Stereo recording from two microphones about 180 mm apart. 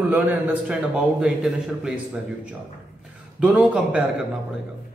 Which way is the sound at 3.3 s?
5° right (ahead or behind).